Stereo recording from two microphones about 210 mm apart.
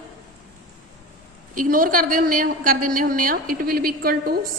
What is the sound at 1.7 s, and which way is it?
A woman's voice, 40° right (ahead or behind).